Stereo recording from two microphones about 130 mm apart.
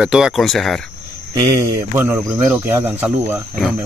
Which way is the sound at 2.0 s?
10° right (ahead or behind).